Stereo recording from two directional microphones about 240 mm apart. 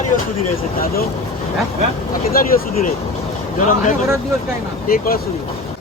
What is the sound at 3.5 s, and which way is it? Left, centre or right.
Speech, left.